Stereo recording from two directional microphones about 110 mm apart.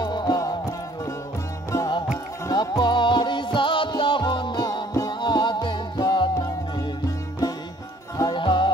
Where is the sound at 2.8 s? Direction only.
45° left (ahead or behind).